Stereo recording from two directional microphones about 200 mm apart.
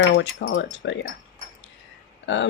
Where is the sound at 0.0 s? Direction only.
65° left (ahead or behind).